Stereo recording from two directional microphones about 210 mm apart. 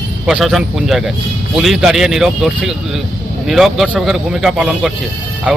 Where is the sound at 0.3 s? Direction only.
Centre (ahead or behind).